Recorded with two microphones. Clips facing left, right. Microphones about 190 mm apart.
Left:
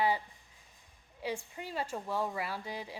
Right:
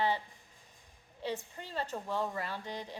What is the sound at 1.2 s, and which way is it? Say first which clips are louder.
A woman's voice: left 1 dB; 10° left (ahead or behind).